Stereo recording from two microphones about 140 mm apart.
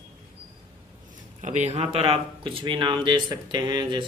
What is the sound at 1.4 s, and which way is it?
Speech, 55° right (ahead or behind).